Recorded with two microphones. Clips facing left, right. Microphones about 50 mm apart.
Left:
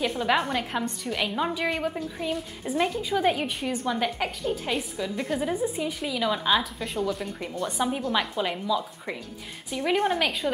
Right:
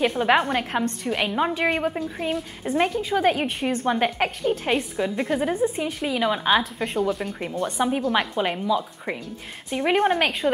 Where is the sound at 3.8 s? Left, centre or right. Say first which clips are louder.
Right 5 dB; right.